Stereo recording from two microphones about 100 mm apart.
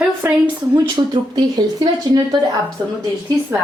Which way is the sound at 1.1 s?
45° right (ahead or behind).